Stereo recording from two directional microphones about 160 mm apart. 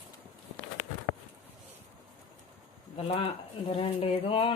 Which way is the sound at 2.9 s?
40° left (ahead or behind).